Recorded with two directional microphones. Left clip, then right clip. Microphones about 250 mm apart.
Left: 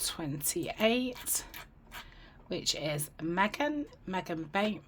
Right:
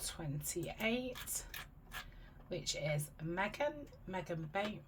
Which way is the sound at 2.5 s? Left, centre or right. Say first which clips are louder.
Left 6 dB; left.